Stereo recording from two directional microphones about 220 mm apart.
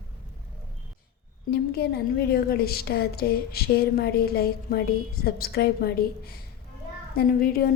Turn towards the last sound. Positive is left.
turn(degrees=40)  # may be behind; listen again after turning